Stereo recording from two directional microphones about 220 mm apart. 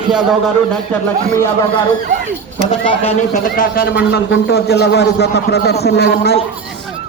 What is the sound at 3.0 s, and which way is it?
A man's voice, 30° left (ahead or behind).